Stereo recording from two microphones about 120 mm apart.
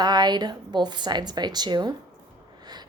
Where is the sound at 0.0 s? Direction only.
35° right (ahead or behind).